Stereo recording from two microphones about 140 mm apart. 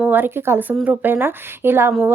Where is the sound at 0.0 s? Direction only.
15° right (ahead or behind).